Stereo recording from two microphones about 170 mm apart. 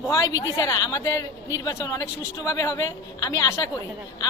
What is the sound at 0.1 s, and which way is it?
A man's voice, 20° left (ahead or behind).